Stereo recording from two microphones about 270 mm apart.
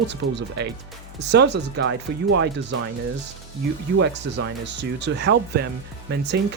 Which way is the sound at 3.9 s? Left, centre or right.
Right.